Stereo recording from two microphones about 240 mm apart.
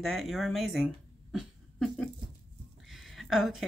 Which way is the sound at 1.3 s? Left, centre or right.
Centre.